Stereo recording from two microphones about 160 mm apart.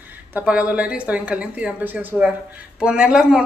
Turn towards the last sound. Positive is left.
turn(degrees=-5)  # may be behind; listen again after turning